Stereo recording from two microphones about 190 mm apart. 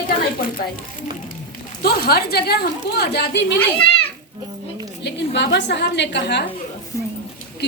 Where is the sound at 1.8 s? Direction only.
55° left (ahead or behind).